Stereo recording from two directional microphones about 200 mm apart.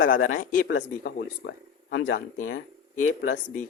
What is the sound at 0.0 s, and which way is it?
Speech, 45° left (ahead or behind).